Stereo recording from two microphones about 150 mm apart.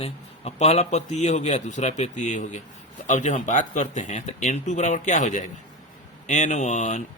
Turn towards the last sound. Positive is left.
turn(degrees=50)  # may be behind; listen again after turning